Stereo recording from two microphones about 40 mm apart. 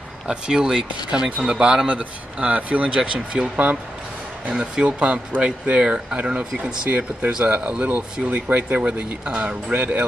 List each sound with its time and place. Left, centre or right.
0.5 s speech: centre
1.9 s speech: right
2.9 s speech: right
4.8 s speech: right
6.9 s speech: right
7.4 s speech: right